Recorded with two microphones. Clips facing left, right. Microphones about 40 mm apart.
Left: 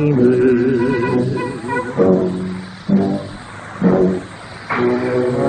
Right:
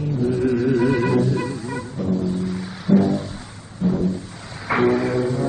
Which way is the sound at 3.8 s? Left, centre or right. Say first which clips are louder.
Left 8 dB; left.